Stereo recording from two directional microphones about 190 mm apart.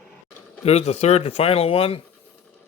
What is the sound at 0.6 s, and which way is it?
Speech, 35° left (ahead or behind).